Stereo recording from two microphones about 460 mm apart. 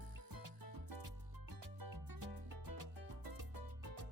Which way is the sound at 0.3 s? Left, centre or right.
Right.